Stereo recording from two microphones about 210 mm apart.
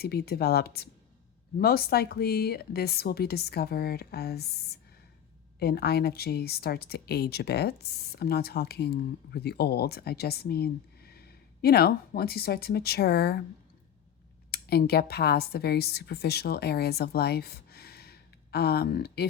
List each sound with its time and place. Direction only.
0.0 s speech: 50° left (ahead or behind)
5.5 s speech: 50° left (ahead or behind)
14.5 s speech: 50° left (ahead or behind)